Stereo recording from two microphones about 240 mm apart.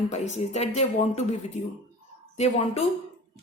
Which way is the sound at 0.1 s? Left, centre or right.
Left.